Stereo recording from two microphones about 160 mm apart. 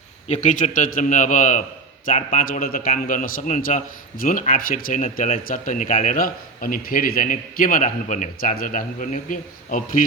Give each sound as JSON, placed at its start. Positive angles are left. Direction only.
{"t": 0.3, "sound": "a man's voice", "side_deg": 50}